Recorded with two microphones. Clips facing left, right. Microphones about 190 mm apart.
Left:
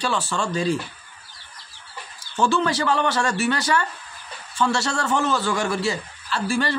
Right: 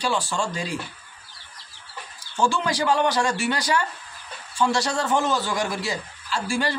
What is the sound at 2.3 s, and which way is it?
A man's voice, 10° right (ahead or behind).